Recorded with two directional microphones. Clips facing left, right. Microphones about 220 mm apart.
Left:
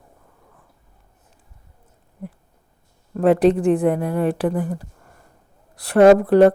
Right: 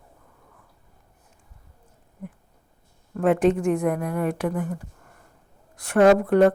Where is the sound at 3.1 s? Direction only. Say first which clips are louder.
Left 4 dB; 35° left (ahead or behind).